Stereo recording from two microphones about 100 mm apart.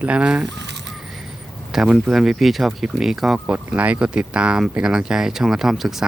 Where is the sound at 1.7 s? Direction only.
5° right (ahead or behind).